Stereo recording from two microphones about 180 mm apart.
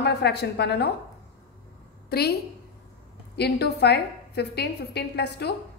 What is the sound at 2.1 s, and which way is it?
A woman's voice, 60° left (ahead or behind).